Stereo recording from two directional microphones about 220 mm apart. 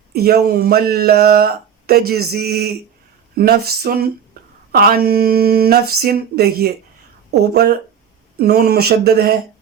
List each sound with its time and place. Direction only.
0.1 s speech: 45° right (ahead or behind)